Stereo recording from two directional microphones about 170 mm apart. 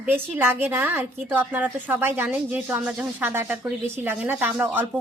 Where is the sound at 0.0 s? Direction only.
10° right (ahead or behind).